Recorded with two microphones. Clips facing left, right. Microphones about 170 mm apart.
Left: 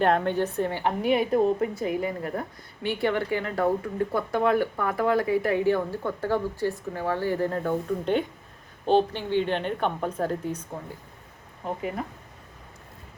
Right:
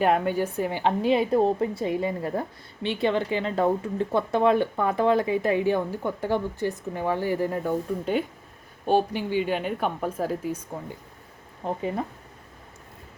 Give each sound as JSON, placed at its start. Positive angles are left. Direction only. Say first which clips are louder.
{"t": 0.0, "sound": "speech", "louder": "even", "side_deg": -5}
{"t": 11.6, "sound": "speech", "louder": "right 2 dB", "side_deg": -30}